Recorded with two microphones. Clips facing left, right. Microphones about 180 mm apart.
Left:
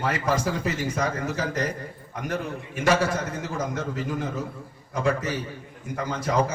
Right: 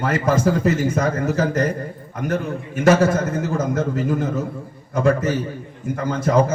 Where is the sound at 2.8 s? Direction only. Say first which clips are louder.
Right 7 dB; 50° right (ahead or behind).